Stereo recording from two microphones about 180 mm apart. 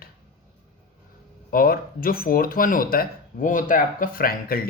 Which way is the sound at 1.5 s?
55° left (ahead or behind).